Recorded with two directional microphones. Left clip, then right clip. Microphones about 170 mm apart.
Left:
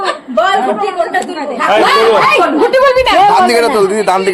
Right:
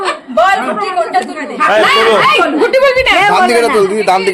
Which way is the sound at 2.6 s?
15° right (ahead or behind).